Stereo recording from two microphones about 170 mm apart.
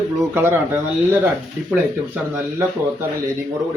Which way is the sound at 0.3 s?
15° right (ahead or behind).